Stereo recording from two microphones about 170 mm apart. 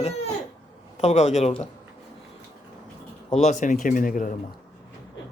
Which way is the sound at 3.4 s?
45° left (ahead or behind).